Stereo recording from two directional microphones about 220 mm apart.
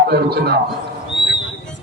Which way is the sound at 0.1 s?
45° right (ahead or behind).